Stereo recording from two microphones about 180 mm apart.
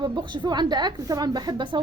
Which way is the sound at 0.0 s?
25° right (ahead or behind).